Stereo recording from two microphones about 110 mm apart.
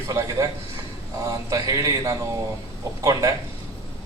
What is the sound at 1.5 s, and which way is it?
A man's voice, 30° right (ahead or behind).